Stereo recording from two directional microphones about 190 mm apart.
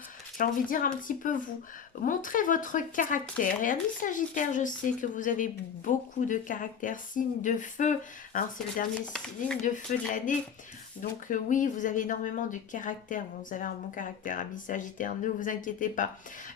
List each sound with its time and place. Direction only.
0.3 s speech: 45° left (ahead or behind)
9.9 s speech: 45° left (ahead or behind)